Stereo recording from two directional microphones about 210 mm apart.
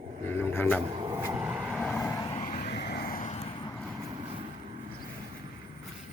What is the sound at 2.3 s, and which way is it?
Vehicle, 40° left (ahead or behind).